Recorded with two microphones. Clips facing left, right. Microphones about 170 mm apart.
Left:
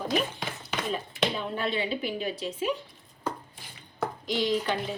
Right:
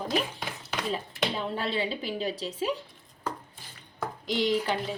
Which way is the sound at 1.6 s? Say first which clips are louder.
Left 1 dB; 35° right (ahead or behind).